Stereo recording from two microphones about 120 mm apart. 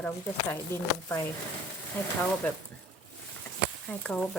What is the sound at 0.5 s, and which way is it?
Speech, 20° left (ahead or behind).